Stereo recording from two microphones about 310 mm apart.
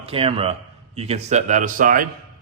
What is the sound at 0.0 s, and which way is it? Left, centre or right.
A man's voice, centre.